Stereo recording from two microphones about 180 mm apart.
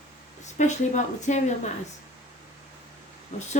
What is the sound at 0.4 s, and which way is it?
A woman's voice, 40° left (ahead or behind).